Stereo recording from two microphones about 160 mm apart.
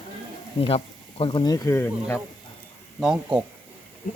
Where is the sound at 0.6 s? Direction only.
35° left (ahead or behind); by 1.9 s 20° left (ahead or behind).